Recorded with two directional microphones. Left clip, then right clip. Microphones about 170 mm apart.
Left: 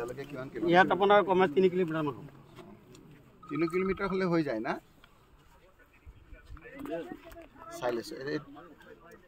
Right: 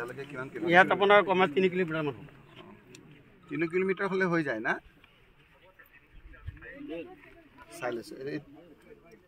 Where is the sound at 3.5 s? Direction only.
5° left (ahead or behind).